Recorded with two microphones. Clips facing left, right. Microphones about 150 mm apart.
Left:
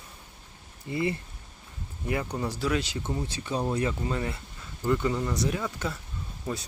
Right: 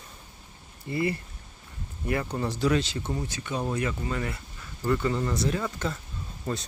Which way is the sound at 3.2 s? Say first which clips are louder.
Left 1 dB; 30° left (ahead or behind).